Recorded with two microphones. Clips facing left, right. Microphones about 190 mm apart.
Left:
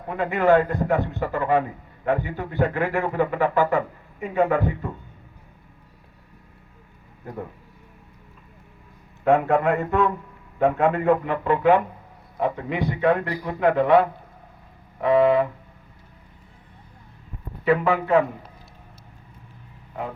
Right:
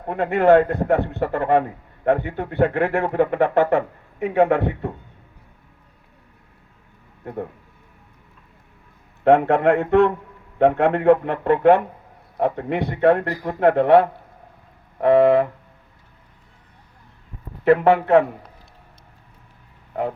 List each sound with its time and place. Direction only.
0.1 s speech: 60° right (ahead or behind)
9.2 s a man's voice: 70° right (ahead or behind)
15.0 s speech: 55° right (ahead or behind)